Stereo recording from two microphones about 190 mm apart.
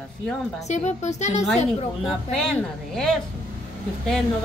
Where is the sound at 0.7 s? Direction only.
35° left (ahead or behind).